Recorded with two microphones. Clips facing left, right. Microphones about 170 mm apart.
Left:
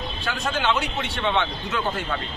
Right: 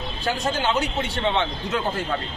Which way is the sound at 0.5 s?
35° right (ahead or behind).